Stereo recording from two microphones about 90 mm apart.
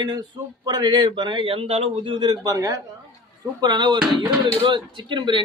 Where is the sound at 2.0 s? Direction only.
55° right (ahead or behind); by 2.8 s 40° right (ahead or behind).